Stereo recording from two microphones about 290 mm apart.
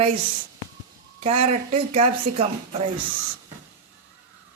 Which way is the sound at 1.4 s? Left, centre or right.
Right.